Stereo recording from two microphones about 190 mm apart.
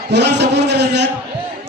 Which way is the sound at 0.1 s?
65° right (ahead or behind).